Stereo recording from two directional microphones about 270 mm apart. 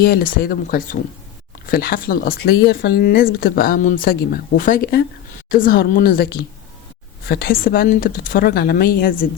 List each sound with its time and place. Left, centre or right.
0.0 s speech: left